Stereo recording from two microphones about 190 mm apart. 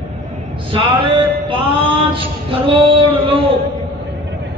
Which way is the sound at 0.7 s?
25° right (ahead or behind).